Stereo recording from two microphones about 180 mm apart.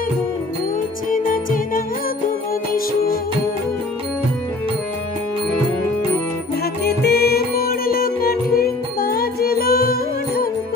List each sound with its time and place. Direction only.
1.1 s music: 50° left (ahead or behind)
6.6 s music: 60° left (ahead or behind)